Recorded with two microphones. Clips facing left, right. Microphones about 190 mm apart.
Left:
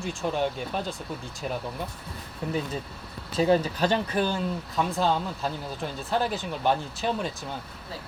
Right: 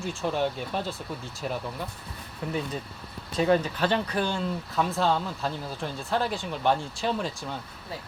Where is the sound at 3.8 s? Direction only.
5° left (ahead or behind).